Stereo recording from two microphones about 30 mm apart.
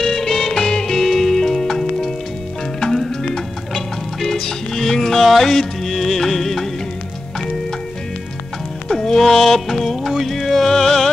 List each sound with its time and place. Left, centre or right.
0.0 s music: centre
3.3 s music: centre
8.8 s music: left